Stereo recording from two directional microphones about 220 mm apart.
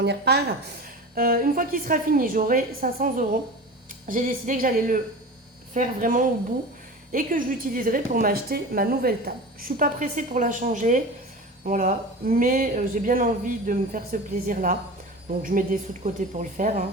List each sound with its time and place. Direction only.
0.0 s a woman's voice: 50° right (ahead or behind)